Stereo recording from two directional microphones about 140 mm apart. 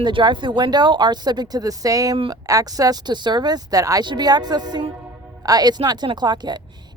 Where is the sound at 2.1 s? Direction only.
35° right (ahead or behind).